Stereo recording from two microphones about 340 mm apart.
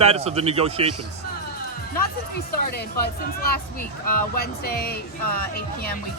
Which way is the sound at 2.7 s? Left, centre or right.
Left.